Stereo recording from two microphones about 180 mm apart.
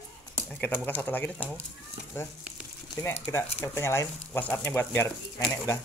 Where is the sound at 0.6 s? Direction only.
10° left (ahead or behind).